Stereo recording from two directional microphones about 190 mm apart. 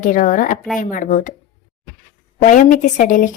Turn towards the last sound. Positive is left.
turn(degrees=45)  # may be behind; listen again after turning